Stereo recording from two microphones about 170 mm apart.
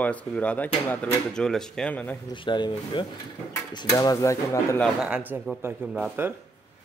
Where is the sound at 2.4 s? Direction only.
25° left (ahead or behind).